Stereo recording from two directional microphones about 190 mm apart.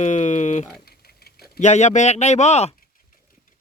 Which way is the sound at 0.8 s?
55° left (ahead or behind).